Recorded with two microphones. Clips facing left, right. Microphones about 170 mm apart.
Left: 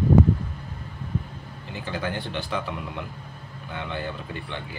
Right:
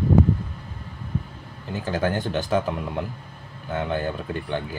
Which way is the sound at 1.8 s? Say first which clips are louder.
Right 6 dB; 45° right (ahead or behind).